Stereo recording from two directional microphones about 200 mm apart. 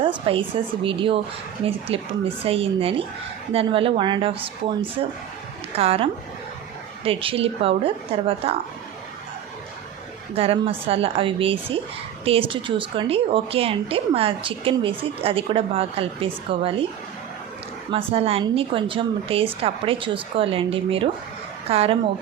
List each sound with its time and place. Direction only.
0.0 s a woman's voice: 25° right (ahead or behind)
5.7 s a woman's voice: 30° right (ahead or behind)
10.3 s a woman's voice: 30° right (ahead or behind)
17.9 s a woman's voice: 30° right (ahead or behind)